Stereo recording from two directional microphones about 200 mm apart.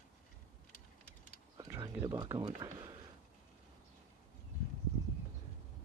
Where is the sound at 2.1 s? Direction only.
20° right (ahead or behind).